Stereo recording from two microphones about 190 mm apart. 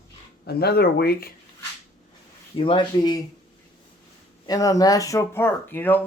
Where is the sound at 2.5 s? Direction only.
25° left (ahead or behind).